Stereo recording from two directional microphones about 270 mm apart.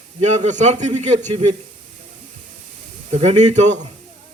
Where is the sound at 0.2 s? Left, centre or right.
Right.